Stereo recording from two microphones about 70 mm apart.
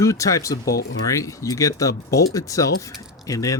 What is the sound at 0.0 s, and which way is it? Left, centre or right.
Speech, left.